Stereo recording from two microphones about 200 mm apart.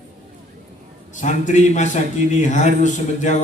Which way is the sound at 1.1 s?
40° left (ahead or behind).